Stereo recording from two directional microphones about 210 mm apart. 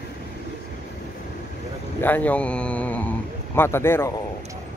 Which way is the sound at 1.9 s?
10° left (ahead or behind).